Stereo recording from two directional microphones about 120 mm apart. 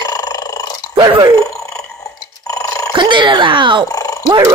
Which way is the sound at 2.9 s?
40° right (ahead or behind).